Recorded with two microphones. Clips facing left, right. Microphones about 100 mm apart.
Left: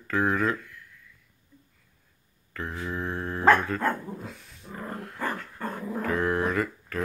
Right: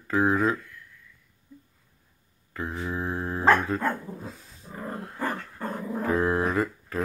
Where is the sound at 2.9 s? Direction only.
20° right (ahead or behind).